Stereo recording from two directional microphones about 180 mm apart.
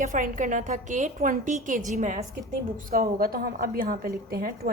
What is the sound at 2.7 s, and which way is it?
A woman's voice, 55° right (ahead or behind).